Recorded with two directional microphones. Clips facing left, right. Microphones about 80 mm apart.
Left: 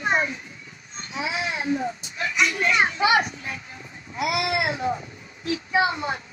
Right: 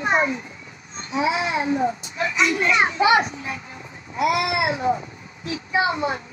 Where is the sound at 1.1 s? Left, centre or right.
Right.